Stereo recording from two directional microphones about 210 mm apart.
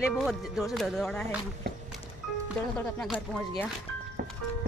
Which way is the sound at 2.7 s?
5° left (ahead or behind).